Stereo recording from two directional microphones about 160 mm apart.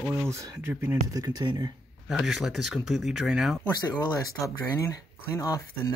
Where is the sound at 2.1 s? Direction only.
Centre (ahead or behind).